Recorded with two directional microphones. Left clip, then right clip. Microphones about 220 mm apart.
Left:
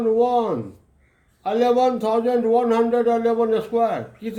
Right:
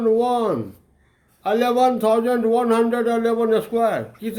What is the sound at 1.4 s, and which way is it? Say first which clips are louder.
Speech: even; 45° right (ahead or behind).